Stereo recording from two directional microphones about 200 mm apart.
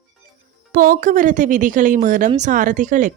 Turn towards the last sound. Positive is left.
turn(degrees=-40)  # may be behind; listen again after turning